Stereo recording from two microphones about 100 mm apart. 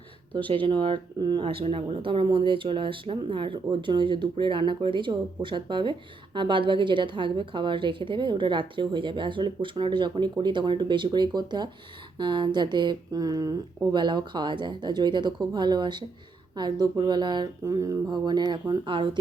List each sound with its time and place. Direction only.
0.3 s speech: 60° right (ahead or behind)
1.5 s speech: 60° right (ahead or behind); by 13.5 s 35° right (ahead or behind)
13.9 s speech: 50° right (ahead or behind)
17.7 s speech: 35° right (ahead or behind)
18.1 s speech: 45° right (ahead or behind)